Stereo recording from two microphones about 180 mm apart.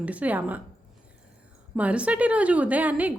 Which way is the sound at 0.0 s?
10° right (ahead or behind).